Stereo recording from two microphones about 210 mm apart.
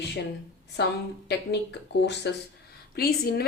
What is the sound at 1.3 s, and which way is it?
Speech, 50° left (ahead or behind).